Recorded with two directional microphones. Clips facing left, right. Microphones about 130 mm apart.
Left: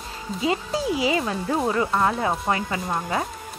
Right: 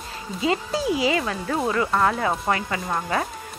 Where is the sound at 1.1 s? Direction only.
15° left (ahead or behind).